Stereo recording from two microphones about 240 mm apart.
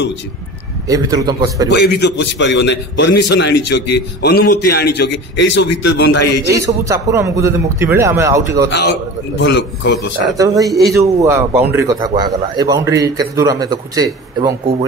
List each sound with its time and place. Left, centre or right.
0.8 s a man's voice: centre
1.7 s a man's voice: left
6.4 s a man's voice: centre
9.4 s a man's voice: left
10.3 s a man's voice: centre